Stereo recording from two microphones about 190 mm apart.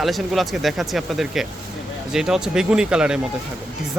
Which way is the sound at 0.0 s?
Centre (ahead or behind).